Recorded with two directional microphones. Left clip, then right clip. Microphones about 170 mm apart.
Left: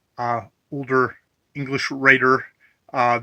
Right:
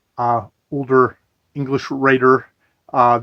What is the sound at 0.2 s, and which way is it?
Speech, 15° left (ahead or behind).